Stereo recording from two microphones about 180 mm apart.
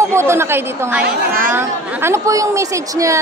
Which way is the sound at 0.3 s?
15° right (ahead or behind).